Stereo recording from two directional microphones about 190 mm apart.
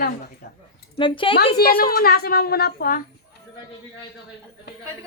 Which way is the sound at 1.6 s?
50° left (ahead or behind).